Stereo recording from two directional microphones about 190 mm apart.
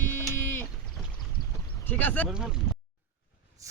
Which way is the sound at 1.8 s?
10° left (ahead or behind).